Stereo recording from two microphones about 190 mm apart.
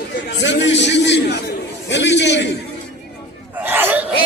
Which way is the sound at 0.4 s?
70° left (ahead or behind).